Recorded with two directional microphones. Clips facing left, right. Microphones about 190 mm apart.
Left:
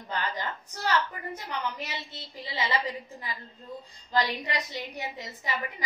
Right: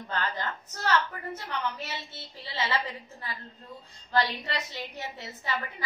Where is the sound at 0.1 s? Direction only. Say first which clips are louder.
Even; 15° left (ahead or behind).